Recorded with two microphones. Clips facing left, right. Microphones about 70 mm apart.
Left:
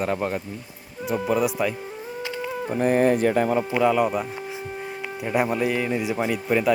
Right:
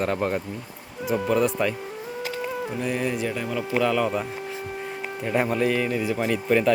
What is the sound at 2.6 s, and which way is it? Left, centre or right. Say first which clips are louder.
Speech: left 10 dB; left.